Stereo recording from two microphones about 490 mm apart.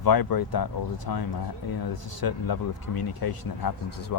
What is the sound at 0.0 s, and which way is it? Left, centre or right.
Speech, left.